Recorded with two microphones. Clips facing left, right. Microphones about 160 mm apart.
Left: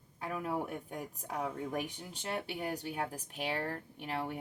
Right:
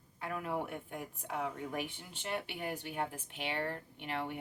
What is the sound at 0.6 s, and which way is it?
Speech, 40° left (ahead or behind).